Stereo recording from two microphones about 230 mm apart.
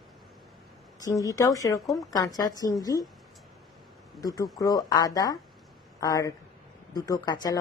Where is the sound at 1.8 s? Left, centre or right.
Centre.